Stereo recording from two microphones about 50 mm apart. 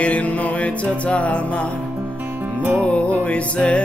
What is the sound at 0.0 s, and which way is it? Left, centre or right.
Music, left.